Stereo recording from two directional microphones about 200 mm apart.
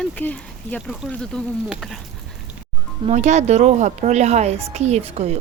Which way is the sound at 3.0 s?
35° right (ahead or behind).